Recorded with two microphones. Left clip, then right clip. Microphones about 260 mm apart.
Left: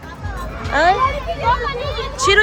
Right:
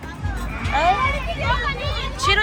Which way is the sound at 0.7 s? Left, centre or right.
Left.